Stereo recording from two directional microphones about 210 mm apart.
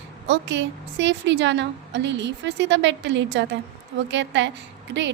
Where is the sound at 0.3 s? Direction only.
60° right (ahead or behind).